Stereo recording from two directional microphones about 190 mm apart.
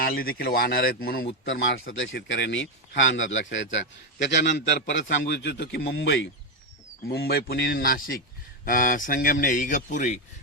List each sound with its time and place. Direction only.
0.0 s a man's voice: 50° left (ahead or behind)
1.5 s a man's voice: 85° left; by 10.2 s 40° left (ahead or behind)